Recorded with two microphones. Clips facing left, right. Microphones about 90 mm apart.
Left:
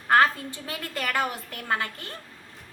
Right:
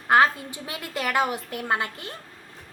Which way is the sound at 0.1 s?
15° right (ahead or behind).